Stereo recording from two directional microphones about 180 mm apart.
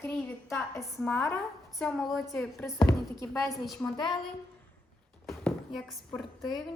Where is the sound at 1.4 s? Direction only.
Centre (ahead or behind).